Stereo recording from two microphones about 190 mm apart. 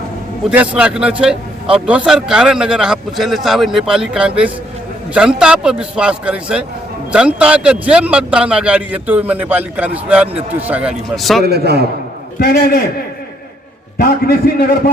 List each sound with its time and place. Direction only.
0.5 s a man's voice: 5° right (ahead or behind)
11.4 s a man's voice: 60° right (ahead or behind)
12.4 s a man's voice: 55° left (ahead or behind)
14.0 s a man's voice: 55° left (ahead or behind)